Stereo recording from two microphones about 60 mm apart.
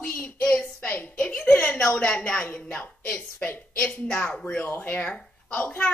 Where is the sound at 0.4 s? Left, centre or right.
Centre.